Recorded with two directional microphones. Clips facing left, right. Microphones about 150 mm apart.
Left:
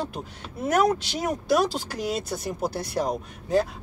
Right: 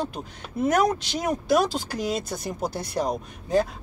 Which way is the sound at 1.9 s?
5° left (ahead or behind).